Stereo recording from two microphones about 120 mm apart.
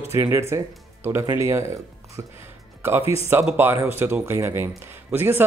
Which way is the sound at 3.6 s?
15° right (ahead or behind).